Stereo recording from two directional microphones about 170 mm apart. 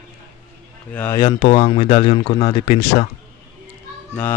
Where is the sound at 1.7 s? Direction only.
30° left (ahead or behind).